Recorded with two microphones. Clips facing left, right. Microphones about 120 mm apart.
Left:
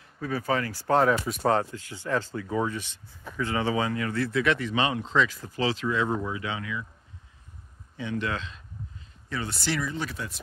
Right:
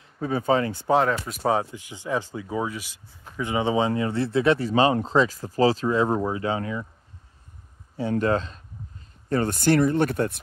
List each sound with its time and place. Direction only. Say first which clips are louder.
0.2 s speech: right 5 dB; 25° right (ahead or behind)
1.0 s speech: even; 5° left (ahead or behind)
3.4 s speech: right 4 dB; 20° right (ahead or behind); by 6.9 s 40° right (ahead or behind)
8.0 s speech: right 8 dB; 40° right (ahead or behind)